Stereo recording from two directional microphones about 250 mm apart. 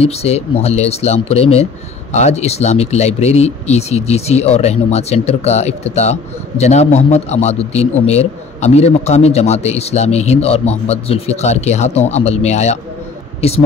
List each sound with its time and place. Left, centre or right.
0.0 s a man's voice: left